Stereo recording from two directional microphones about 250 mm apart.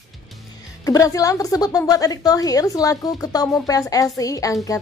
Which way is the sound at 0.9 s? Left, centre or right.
Centre.